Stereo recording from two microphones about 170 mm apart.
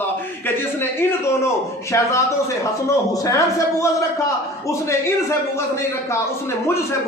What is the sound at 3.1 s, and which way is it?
Speech, 20° left (ahead or behind).